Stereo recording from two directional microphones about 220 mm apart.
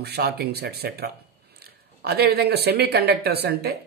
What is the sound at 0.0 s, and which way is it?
Speech, 45° right (ahead or behind).